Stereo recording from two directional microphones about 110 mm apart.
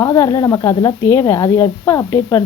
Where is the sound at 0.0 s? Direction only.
25° left (ahead or behind).